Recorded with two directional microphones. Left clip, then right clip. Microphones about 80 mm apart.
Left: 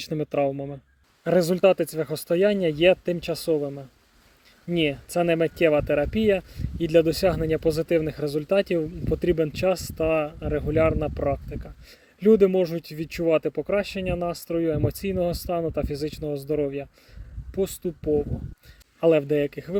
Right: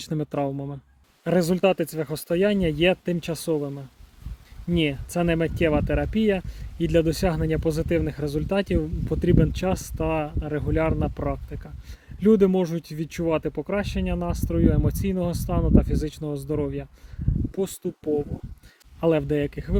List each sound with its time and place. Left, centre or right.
0.0 s speech: right
12.2 s speech: right